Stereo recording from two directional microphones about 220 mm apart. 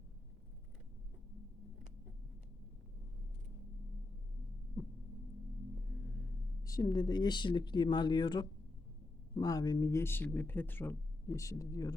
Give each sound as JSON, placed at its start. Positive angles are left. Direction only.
{"t": 6.1, "sound": "speech", "side_deg": 15}